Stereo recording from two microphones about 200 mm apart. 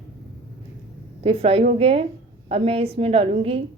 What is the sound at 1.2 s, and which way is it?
Speech, 30° right (ahead or behind).